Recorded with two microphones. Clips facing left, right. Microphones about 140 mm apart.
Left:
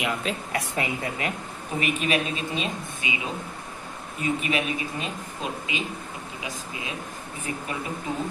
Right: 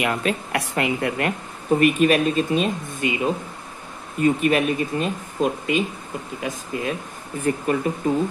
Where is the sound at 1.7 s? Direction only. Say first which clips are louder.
Right 9 dB; 50° right (ahead or behind).